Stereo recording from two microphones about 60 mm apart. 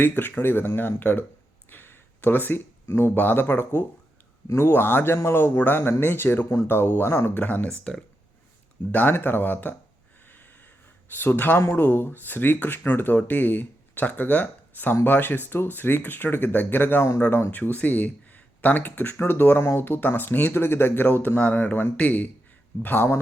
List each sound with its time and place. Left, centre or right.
0.2 s speech: left
1.7 s a sound: left
3.2 s speech: left
7.7 s speech: centre
8.9 s speech: left
10.2 s snort: left
11.1 s speech: left